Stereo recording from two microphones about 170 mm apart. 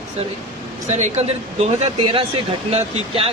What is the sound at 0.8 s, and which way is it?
Speech, 45° right (ahead or behind).